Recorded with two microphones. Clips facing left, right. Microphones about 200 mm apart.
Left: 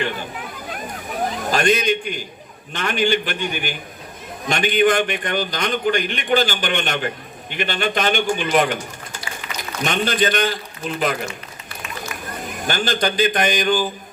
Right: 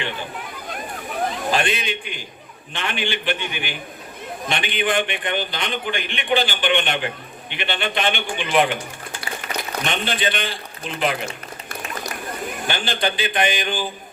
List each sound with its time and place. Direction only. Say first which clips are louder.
1.5 s a man's voice: left 7 dB; 40° left (ahead or behind)
9.4 s a sound: right 7 dB; 45° right (ahead or behind)
9.8 s a man's voice: left 6 dB; 45° left (ahead or behind)
12.6 s a man's voice: left 3 dB; 45° left (ahead or behind)